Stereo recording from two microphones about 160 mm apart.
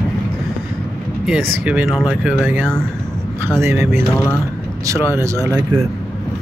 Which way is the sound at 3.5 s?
15° right (ahead or behind).